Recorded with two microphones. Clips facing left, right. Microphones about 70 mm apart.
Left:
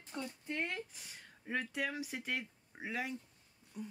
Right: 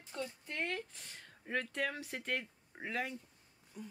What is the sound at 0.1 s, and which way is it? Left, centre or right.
A woman's voice, centre.